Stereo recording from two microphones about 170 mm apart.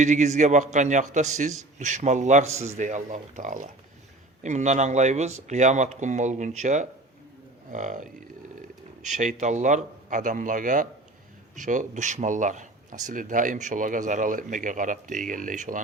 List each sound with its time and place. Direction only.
0.0 s a man's voice: 45° right (ahead or behind)